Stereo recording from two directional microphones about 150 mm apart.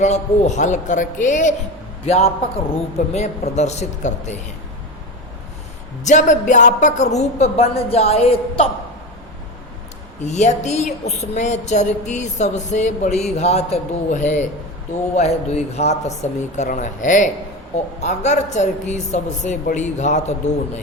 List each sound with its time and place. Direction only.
0.0 s a woman's voice: 50° left (ahead or behind)
2.0 s a woman's voice: 45° left (ahead or behind)
6.1 s a woman's voice: 55° left (ahead or behind)
10.2 s a woman's voice: 50° left (ahead or behind)